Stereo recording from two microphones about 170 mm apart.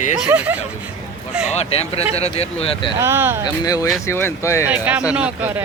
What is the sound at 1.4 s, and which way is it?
Speech, 35° left (ahead or behind).